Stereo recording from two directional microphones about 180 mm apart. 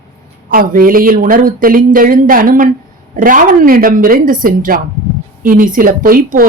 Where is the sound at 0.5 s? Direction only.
55° right (ahead or behind).